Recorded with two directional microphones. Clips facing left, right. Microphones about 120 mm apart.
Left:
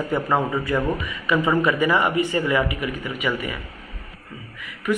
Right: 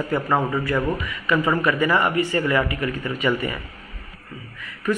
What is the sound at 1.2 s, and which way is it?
Speech, 15° left (ahead or behind).